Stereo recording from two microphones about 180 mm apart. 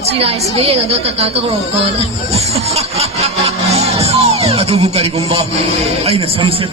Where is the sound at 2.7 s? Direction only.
35° right (ahead or behind).